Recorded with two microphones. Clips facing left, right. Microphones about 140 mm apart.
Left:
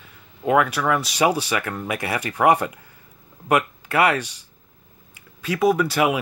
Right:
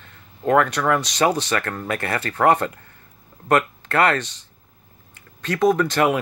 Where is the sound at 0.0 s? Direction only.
10° left (ahead or behind).